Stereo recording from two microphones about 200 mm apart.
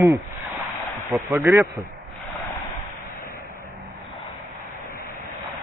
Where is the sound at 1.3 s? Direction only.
10° right (ahead or behind).